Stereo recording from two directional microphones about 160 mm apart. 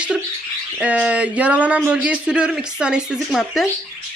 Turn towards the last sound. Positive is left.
turn(degrees=0)  # may be behind; listen again after turning